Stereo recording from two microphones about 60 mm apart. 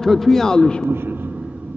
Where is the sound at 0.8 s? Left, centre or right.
Right.